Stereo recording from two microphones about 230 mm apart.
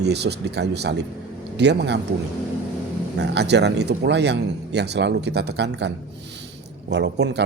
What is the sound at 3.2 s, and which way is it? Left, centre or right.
Speech, right.